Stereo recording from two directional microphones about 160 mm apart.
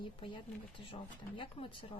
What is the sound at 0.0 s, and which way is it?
Speech, 30° left (ahead or behind).